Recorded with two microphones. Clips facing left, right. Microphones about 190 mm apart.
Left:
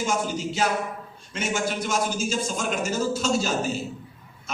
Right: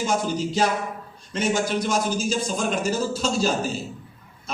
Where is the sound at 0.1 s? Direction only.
35° right (ahead or behind).